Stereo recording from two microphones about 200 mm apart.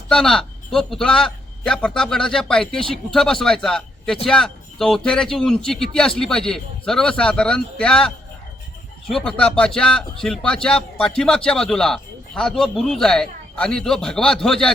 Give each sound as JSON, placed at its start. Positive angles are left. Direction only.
{"t": 0.1, "sound": "a man's voice", "side_deg": 5}